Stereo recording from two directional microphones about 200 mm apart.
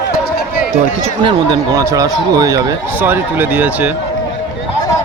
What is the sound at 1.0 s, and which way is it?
Speech, 25° right (ahead or behind).